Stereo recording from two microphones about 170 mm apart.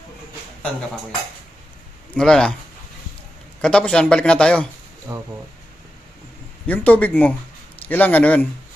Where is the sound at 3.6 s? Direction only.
5° left (ahead or behind).